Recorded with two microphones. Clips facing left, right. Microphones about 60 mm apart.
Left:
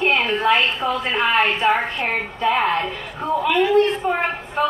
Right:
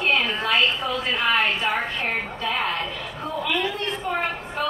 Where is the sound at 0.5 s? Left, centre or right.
Left.